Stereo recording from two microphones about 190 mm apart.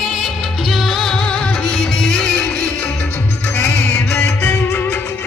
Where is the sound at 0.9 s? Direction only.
Centre (ahead or behind).